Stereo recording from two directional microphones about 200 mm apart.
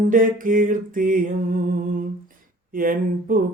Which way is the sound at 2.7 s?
45° right (ahead or behind).